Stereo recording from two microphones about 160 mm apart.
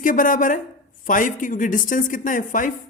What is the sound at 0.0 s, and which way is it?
Speech, 55° left (ahead or behind).